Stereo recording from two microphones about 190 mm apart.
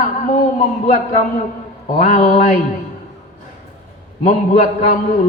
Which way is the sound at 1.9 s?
40° left (ahead or behind).